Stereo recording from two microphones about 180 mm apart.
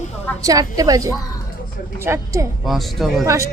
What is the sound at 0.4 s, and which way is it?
A woman's voice, 20° right (ahead or behind).